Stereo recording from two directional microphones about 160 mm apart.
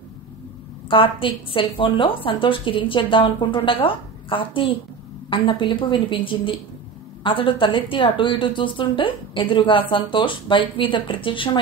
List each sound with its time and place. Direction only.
0.8 s a woman's voice: 35° left (ahead or behind)